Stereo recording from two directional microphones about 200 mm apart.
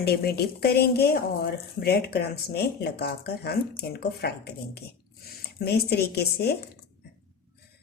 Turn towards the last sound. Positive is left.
turn(degrees=50)  # may be behind; listen again after turning